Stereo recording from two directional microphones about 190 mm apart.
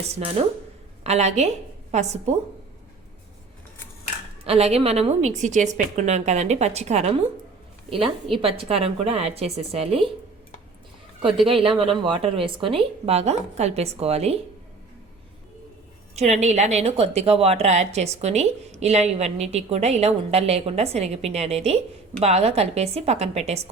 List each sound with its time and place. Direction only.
0.2 s a woman's voice: 30° right (ahead or behind)
4.4 s a woman's voice: 30° right (ahead or behind)
8.4 s a woman's voice: 30° right (ahead or behind)
11.4 s a woman's voice: 30° right (ahead or behind)
16.1 s a woman's voice: 35° right (ahead or behind)